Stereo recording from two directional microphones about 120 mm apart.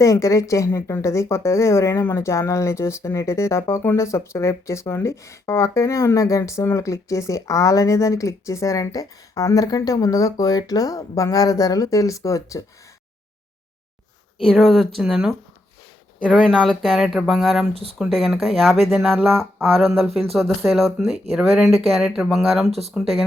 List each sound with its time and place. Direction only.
0.0 s speech: 25° left (ahead or behind)
14.3 s speech: centre (ahead or behind)
16.4 s speech: 5° left (ahead or behind)